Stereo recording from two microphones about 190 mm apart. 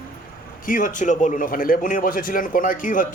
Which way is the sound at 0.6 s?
45° left (ahead or behind).